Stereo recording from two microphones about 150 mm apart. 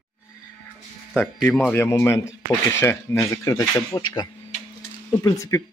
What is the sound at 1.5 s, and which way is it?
Speech, 10° left (ahead or behind).